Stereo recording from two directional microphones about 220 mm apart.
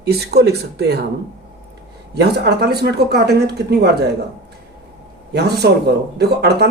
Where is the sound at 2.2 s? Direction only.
45° right (ahead or behind).